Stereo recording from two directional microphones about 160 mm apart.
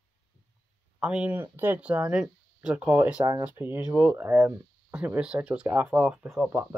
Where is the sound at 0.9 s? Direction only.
5° right (ahead or behind).